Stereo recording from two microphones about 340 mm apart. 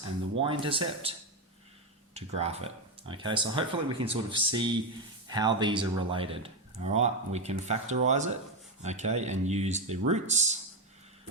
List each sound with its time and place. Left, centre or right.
0.0 s speech: centre
2.1 s speech: centre